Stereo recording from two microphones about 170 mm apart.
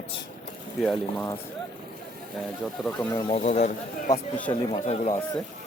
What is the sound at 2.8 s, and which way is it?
Speech, 5° right (ahead or behind).